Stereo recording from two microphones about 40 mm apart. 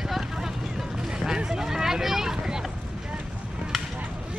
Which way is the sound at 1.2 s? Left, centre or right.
Centre.